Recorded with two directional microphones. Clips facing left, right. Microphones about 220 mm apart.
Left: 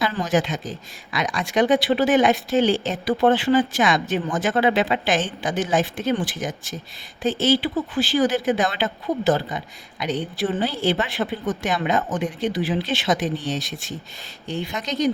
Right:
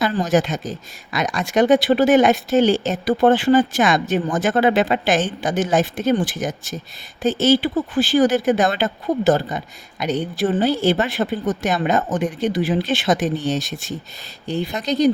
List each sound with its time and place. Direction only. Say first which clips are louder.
0.0 s speech: right 4 dB; 45° right (ahead or behind)